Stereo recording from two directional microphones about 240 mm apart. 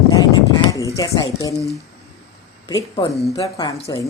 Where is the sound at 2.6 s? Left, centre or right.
Centre.